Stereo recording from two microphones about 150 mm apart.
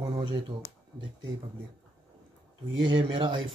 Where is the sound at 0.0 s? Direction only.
30° right (ahead or behind).